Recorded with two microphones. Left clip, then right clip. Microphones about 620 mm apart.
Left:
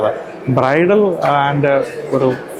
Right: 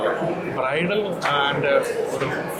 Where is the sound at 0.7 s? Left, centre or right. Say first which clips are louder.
Left 11 dB; left.